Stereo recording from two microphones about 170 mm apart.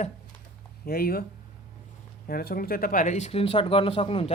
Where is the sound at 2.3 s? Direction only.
60° left (ahead or behind).